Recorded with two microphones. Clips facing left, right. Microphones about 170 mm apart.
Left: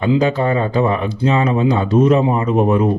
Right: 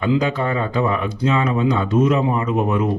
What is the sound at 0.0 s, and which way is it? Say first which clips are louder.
A man's voice: left 4 dB; 30° left (ahead or behind).